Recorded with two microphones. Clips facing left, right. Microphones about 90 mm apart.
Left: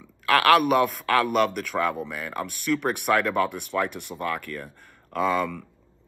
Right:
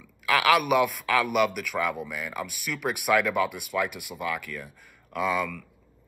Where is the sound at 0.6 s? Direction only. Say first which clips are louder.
Left 2 dB; 40° left (ahead or behind).